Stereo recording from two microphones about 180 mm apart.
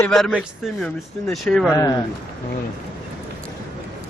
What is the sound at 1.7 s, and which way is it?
Speech, 20° left (ahead or behind).